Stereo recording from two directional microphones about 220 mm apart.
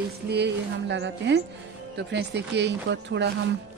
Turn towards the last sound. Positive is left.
turn(degrees=-50)  # may be behind; listen again after turning